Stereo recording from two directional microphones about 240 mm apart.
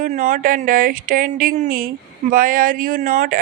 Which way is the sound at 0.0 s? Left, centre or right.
Right.